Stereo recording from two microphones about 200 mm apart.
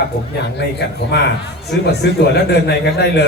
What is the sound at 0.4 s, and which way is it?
A man's voice, 55° left (ahead or behind).